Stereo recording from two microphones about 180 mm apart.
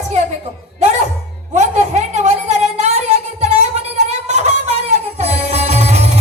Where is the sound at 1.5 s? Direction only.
40° right (ahead or behind).